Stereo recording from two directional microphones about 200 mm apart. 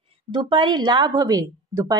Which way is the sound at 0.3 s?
25° right (ahead or behind).